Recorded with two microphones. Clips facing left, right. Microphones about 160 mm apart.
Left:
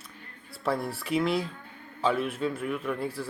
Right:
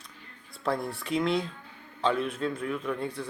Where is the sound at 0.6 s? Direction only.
5° left (ahead or behind).